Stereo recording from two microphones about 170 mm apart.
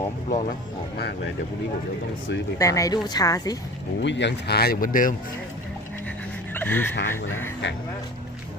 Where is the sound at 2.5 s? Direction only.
20° left (ahead or behind).